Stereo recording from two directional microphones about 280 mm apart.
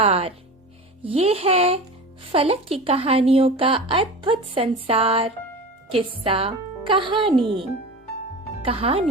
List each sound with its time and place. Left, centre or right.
0.0 s speech: right
7.3 s a child's voice: centre
8.6 s speech: right